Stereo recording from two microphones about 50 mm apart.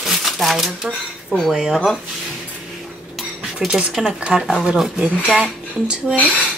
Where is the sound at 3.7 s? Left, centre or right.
Right.